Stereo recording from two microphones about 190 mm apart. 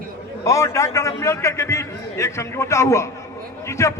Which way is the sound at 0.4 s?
15° left (ahead or behind).